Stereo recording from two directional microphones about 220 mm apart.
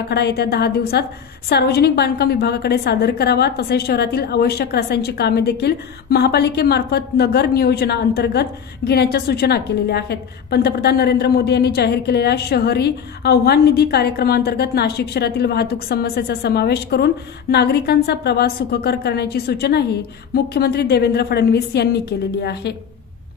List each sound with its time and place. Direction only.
0.1 s a woman's voice: 45° left (ahead or behind)